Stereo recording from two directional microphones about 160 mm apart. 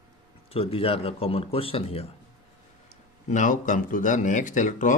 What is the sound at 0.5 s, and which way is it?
A man's voice, 35° left (ahead or behind).